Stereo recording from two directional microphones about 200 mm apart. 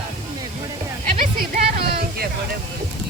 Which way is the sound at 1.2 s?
45° right (ahead or behind).